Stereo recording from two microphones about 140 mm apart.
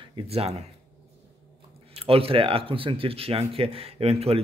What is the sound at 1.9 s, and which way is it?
Speech, 45° right (ahead or behind).